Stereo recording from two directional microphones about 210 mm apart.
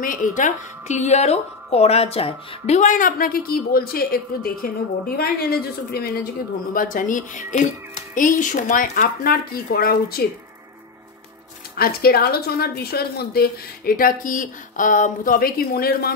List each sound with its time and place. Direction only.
0.0 s a woman's voice: 40° left (ahead or behind)
11.7 s speech: 45° left (ahead or behind)